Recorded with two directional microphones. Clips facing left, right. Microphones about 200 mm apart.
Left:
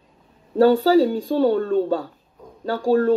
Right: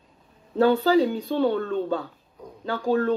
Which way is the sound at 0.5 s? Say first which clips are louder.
Left 4 dB; 45° left (ahead or behind).